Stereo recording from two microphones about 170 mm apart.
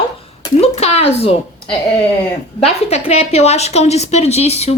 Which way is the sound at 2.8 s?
40° left (ahead or behind).